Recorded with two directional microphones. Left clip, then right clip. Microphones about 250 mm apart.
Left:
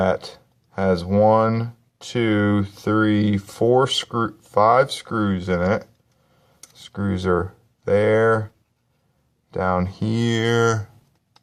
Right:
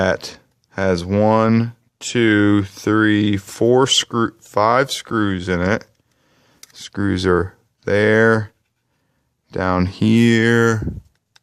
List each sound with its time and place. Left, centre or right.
0.0 s speech: right